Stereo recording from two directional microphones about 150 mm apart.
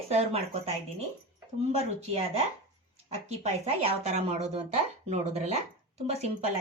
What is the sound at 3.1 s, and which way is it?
Speech, 45° right (ahead or behind).